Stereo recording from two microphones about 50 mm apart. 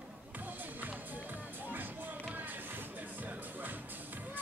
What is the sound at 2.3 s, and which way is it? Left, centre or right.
Music, right.